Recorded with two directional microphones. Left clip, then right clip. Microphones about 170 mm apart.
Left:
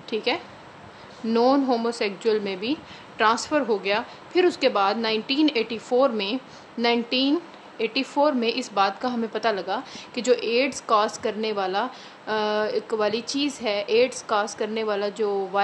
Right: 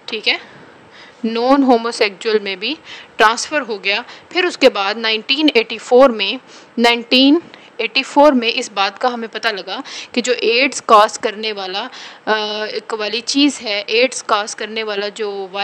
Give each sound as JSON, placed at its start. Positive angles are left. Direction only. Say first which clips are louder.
{"t": 0.0, "sound": "a woman's voice", "louder": "right 7 dB", "side_deg": -50}
{"t": 1.2, "sound": "a woman's voice", "louder": "right 7 dB", "side_deg": -40}